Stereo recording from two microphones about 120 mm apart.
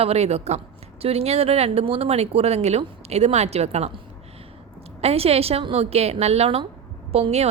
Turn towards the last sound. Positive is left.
turn(degrees=-60)  # may be behind; listen again after turning